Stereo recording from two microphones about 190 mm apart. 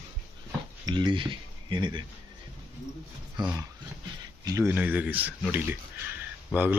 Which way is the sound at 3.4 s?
25° right (ahead or behind).